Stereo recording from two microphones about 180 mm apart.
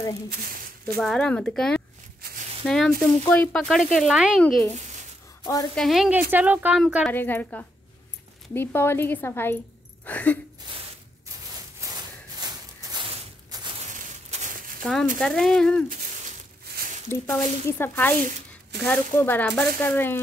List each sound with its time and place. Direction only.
0.9 s speech: 5° left (ahead or behind)
5.4 s a woman's voice: 20° left (ahead or behind)
5.8 s speech: centre (ahead or behind)
7.1 s speech: 10° left (ahead or behind)
11.8 s a sound: 20° right (ahead or behind)
14.3 s a sound: 45° right (ahead or behind)
14.8 s speech: 5° left (ahead or behind)
17.1 s speech: 15° left (ahead or behind)